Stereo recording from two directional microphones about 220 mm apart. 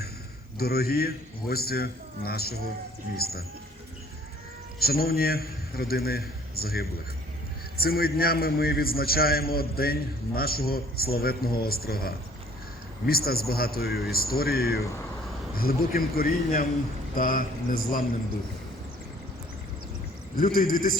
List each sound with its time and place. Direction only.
0.6 s a man's voice: 45° left (ahead or behind)
4.8 s a man's voice: 45° left (ahead or behind)
20.4 s a man's voice: 40° left (ahead or behind)